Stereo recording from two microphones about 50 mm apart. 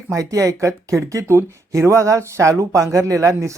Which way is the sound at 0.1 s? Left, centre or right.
Right.